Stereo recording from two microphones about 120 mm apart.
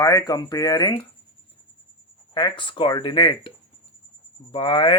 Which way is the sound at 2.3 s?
40° left (ahead or behind).